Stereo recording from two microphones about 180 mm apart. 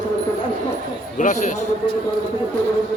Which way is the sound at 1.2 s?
45° left (ahead or behind).